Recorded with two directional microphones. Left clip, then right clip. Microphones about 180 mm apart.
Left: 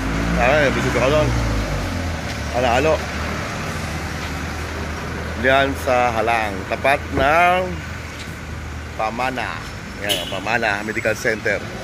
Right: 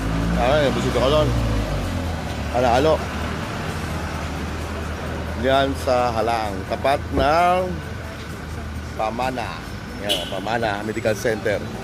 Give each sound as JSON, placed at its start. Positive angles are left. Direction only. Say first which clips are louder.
{"t": 0.4, "sound": "speech", "louder": "left 3 dB", "side_deg": -5}
{"t": 2.6, "sound": "speech", "louder": "even", "side_deg": -20}
{"t": 5.4, "sound": "speech", "louder": "left 3 dB", "side_deg": -10}
{"t": 9.0, "sound": "speech", "louder": "left 2 dB", "side_deg": -5}